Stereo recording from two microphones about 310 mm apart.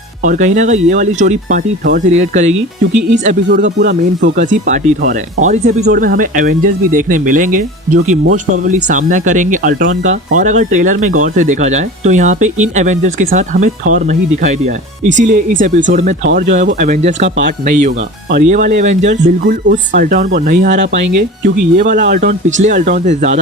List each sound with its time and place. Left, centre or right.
0.2 s speech: right